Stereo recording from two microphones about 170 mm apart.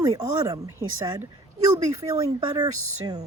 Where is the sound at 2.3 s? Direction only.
25° right (ahead or behind).